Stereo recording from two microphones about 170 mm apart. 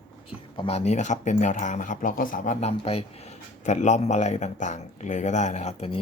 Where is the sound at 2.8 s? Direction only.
35° left (ahead or behind).